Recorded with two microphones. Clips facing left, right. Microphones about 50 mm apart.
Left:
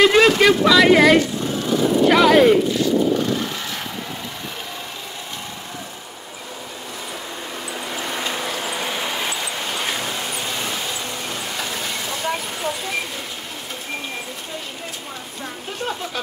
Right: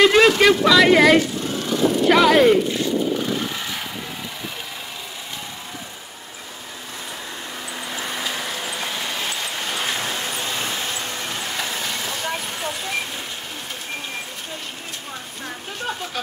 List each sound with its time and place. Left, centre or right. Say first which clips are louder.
0.0 s a sound: even; centre
0.4 s speech: left 1 dB; centre
3.3 s vehicle: left 1 dB; centre
8.2 s vehicle: left 2 dB; centre
10.3 s vehicle: even; right
11.3 s vehicle: right 1 dB; centre